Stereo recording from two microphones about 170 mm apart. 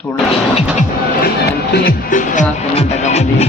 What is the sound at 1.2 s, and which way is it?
Speech, 65° left (ahead or behind).